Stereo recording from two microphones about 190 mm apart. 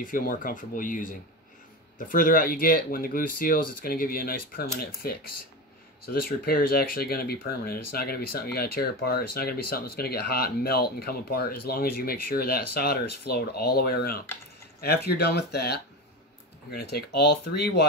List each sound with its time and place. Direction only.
0.0 s speech: 45° left (ahead or behind)